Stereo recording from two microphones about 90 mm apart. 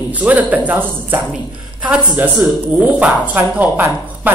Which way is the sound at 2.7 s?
15° right (ahead or behind).